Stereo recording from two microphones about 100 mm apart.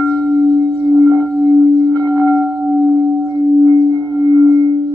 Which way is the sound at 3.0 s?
40° right (ahead or behind).